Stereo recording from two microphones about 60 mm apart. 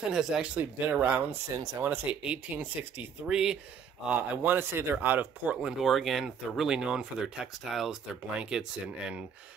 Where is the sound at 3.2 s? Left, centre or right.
Centre.